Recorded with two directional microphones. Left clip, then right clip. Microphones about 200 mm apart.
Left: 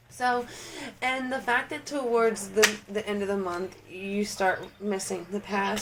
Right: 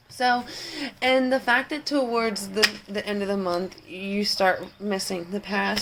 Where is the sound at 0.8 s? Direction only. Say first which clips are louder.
Right 8 dB; 35° right (ahead or behind).